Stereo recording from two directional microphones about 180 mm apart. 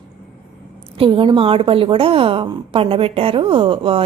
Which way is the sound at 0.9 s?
30° right (ahead or behind).